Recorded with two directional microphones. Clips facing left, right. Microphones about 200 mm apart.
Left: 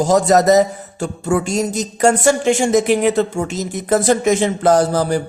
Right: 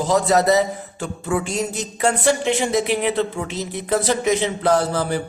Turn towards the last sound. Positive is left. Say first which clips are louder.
# left 5 dB
turn(degrees=40)  # may be behind; listen again after turning